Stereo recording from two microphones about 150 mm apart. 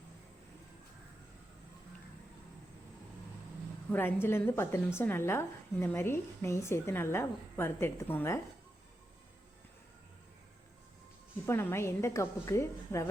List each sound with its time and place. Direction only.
3.9 s a woman's voice: 15° left (ahead or behind)
11.4 s a woman's voice: 15° left (ahead or behind)